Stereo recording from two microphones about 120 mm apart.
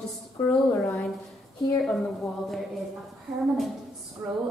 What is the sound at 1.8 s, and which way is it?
Speech, centre (ahead or behind).